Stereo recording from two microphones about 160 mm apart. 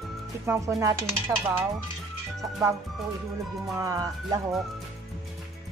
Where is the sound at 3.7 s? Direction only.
20° right (ahead or behind).